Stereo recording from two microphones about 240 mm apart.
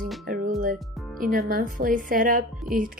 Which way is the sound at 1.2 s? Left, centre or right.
Right.